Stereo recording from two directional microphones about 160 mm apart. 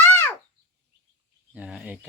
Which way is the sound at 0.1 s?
15° left (ahead or behind).